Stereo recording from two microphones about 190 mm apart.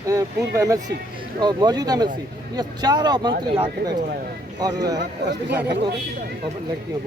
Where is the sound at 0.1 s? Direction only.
15° right (ahead or behind).